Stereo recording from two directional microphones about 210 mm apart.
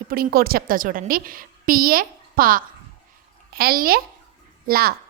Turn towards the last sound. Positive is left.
turn(degrees=-45)  # may be behind; listen again after turning